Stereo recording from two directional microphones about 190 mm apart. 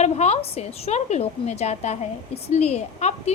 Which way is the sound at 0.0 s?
35° left (ahead or behind).